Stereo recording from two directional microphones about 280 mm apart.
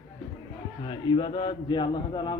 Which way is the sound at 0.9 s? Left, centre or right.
Centre.